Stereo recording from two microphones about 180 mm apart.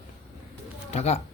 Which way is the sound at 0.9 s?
35° left (ahead or behind).